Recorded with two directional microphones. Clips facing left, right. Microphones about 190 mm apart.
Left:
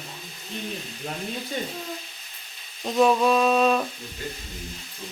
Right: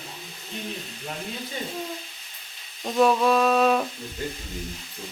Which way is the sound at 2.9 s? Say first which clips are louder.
Even; centre (ahead or behind).